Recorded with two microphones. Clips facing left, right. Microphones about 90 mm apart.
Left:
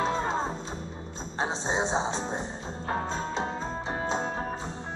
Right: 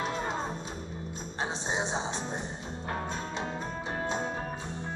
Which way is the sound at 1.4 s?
30° left (ahead or behind).